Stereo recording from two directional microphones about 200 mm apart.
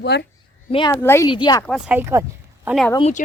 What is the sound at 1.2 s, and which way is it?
Speech, 25° left (ahead or behind).